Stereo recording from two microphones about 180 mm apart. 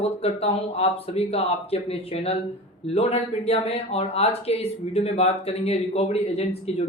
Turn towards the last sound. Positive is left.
turn(degrees=35)  # may be behind; listen again after turning